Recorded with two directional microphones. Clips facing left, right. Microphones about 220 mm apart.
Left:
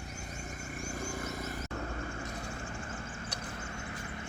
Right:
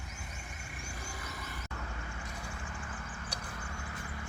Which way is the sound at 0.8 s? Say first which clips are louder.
Left 9 dB; 45° left (ahead or behind).